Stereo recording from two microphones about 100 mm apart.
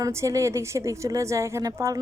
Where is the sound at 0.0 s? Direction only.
30° right (ahead or behind).